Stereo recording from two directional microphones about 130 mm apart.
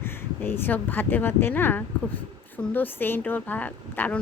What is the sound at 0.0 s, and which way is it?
A woman's voice, 20° left (ahead or behind).